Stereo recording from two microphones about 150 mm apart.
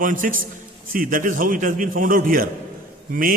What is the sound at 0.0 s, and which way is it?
A man's voice, 65° right (ahead or behind).